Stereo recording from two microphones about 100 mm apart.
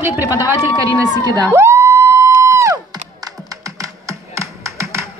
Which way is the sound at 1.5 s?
30° right (ahead or behind).